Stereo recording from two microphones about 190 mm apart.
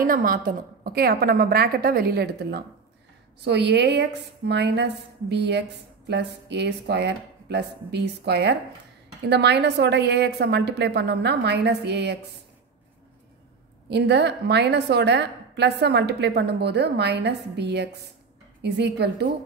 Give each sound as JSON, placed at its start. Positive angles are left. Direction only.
{"t": 0.0, "sound": "a woman's voice", "side_deg": -45}
{"t": 13.8, "sound": "a woman's voice", "side_deg": -60}